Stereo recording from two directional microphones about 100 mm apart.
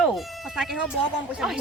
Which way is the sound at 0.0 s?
5° right (ahead or behind).